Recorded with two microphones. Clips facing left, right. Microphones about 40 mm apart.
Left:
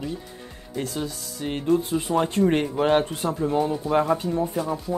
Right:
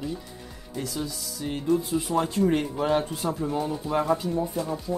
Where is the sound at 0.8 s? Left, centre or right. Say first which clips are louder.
Left 3 dB; left.